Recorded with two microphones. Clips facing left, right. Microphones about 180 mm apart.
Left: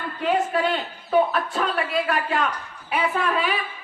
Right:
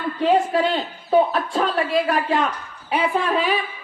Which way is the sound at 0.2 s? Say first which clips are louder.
Right 4 dB; 30° right (ahead or behind).